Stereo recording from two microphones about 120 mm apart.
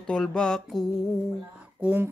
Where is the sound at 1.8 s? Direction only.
15° right (ahead or behind).